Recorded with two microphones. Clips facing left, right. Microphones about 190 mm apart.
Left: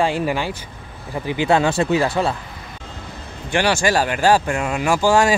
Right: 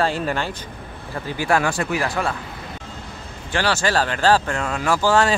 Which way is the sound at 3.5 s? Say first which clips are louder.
Left 3 dB; 15° left (ahead or behind).